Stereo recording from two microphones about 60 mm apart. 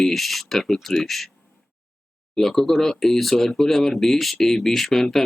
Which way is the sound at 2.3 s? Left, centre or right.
Centre.